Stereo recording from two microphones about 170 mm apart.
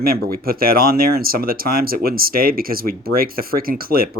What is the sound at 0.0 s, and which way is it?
Speech, 60° right (ahead or behind).